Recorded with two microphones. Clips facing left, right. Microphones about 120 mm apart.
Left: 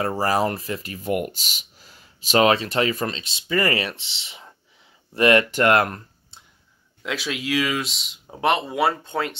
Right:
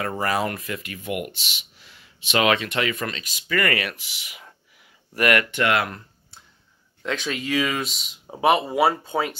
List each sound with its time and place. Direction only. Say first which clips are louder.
0.0 s speech: left 3 dB; 35° left (ahead or behind)
5.6 s speech: left 4 dB; 45° left (ahead or behind)
6.3 s a sound: right 1 dB; 25° left (ahead or behind)
7.0 s speech: right 1 dB; 5° left (ahead or behind)